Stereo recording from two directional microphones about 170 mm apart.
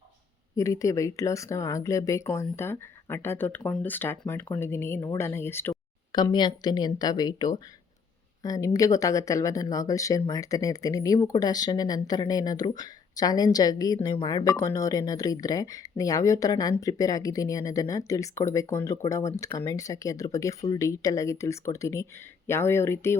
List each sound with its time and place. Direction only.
0.5 s speech: 20° left (ahead or behind)
6.1 s speech: 25° left (ahead or behind)